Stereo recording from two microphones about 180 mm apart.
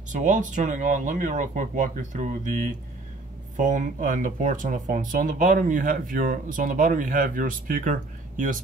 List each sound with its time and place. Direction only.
0.1 s speech: 45° right (ahead or behind)